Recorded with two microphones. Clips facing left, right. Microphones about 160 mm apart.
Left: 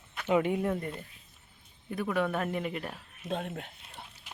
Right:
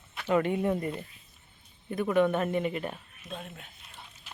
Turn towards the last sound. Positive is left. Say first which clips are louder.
# left 7 dB
turn(degrees=60)  # may be behind; listen again after turning